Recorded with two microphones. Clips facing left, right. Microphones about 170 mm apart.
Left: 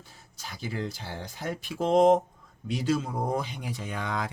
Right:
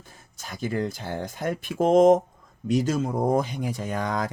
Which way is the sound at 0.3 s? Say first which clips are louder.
Right 7 dB; 50° right (ahead or behind).